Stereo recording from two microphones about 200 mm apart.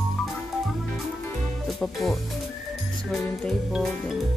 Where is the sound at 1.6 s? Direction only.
Centre (ahead or behind).